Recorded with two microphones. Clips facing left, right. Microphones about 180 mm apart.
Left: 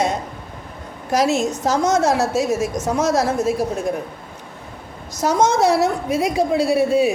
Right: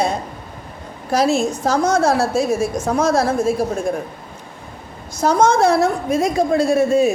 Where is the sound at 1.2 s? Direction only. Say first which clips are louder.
Right 1 dB; 20° left (ahead or behind).